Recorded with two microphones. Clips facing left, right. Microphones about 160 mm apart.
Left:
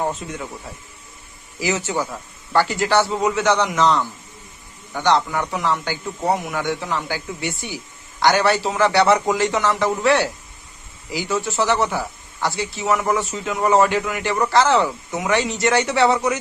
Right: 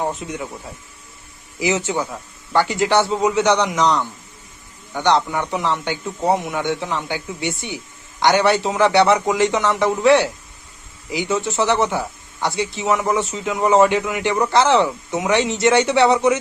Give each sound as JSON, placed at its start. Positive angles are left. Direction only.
{"t": 0.1, "sound": "speech", "side_deg": -15}
{"t": 1.5, "sound": "speech", "side_deg": -20}